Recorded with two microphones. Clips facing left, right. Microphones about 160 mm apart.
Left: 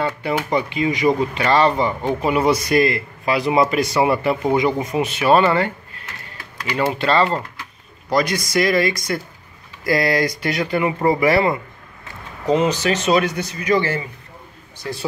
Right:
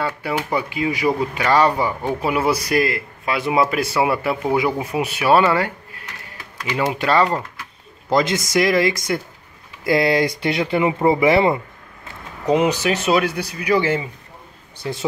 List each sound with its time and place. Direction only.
0.0 s speech: 5° right (ahead or behind)
8.1 s speech: 20° right (ahead or behind)